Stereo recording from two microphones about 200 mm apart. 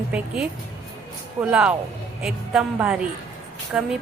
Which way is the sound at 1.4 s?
5° right (ahead or behind).